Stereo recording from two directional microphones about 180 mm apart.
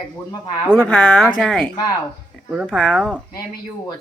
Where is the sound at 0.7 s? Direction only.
5° left (ahead or behind).